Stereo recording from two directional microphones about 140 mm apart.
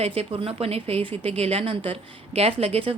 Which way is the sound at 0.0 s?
45° right (ahead or behind).